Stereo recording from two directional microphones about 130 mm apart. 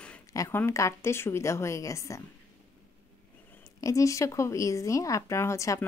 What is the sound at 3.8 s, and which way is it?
Speech, 25° left (ahead or behind).